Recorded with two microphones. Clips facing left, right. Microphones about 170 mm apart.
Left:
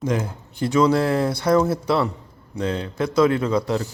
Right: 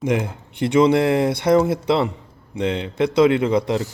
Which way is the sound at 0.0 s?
20° right (ahead or behind).